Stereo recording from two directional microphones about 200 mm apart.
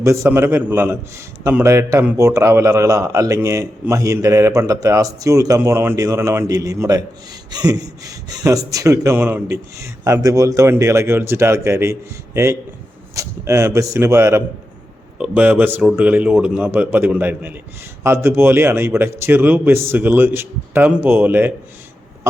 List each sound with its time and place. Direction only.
0.0 s a man's voice: 15° right (ahead or behind)